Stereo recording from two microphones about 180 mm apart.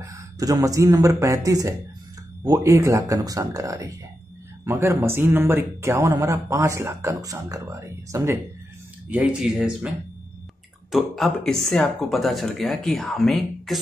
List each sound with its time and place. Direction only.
0.0 s speech: 20° right (ahead or behind)
9.1 s speech: 5° right (ahead or behind)